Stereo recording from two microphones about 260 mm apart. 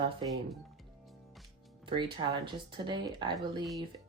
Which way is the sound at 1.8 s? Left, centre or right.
Centre.